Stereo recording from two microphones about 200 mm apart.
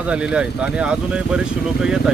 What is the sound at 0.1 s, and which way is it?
Speech, 5° right (ahead or behind).